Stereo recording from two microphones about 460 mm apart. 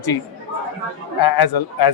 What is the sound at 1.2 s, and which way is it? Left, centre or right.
Speech, left.